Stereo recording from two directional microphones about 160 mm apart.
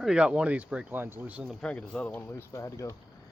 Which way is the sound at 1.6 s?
5° left (ahead or behind).